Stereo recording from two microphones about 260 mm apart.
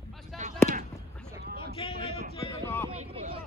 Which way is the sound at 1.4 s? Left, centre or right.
Right.